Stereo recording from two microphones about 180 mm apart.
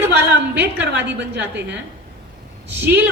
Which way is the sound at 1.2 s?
70° right (ahead or behind).